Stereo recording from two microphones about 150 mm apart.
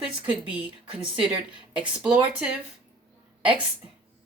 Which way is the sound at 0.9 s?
35° right (ahead or behind).